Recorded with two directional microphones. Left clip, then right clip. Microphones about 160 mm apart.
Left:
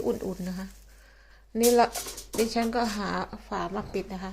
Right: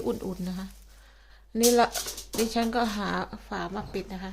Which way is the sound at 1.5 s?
25° right (ahead or behind).